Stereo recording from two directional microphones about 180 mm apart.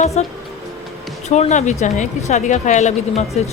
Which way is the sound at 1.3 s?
40° left (ahead or behind).